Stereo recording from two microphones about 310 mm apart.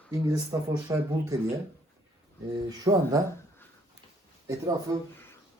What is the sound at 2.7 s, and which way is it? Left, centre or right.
Speech, centre.